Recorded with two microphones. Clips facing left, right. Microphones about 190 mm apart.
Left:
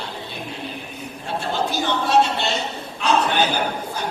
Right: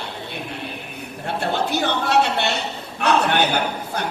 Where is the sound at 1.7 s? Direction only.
65° right (ahead or behind).